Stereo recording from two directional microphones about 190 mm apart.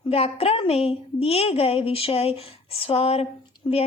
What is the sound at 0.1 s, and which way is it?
A woman's voice, 30° left (ahead or behind).